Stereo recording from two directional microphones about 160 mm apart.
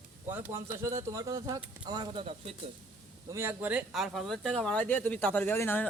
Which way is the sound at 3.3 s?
15° right (ahead or behind).